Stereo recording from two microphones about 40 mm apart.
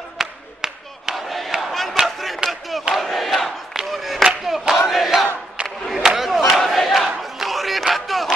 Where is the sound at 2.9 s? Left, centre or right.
Centre.